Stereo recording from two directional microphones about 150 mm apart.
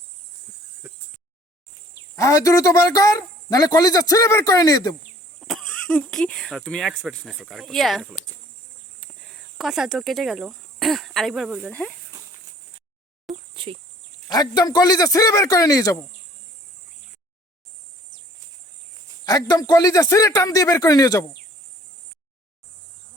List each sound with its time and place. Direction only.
0.8 s a sound: 10° right (ahead or behind)
2.1 s speech: 20° left (ahead or behind)
5.4 s speech: centre (ahead or behind)
13.3 s a sound: 40° right (ahead or behind)
14.3 s speech: 25° left (ahead or behind)
19.2 s speech: 25° left (ahead or behind)